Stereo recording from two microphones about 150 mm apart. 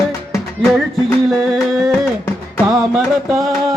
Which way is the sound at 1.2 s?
Centre (ahead or behind).